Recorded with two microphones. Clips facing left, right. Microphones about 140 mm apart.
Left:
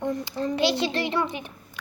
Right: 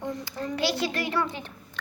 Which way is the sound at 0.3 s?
20° left (ahead or behind).